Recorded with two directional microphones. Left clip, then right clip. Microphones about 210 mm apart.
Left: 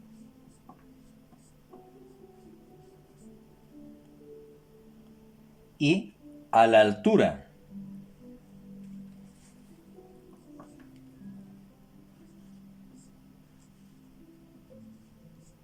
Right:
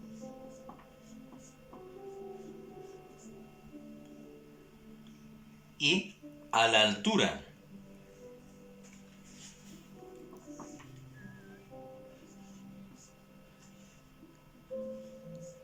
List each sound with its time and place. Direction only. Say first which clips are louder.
5.7 s speech: left 2 dB; 55° left (ahead or behind)